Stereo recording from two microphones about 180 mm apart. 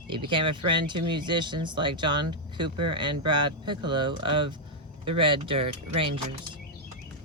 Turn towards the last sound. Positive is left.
turn(degrees=-30)  # may be behind; listen again after turning